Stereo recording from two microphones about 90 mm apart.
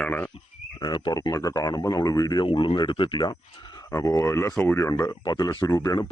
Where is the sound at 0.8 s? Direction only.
55° left (ahead or behind).